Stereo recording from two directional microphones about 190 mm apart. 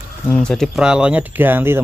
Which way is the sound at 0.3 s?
5° left (ahead or behind).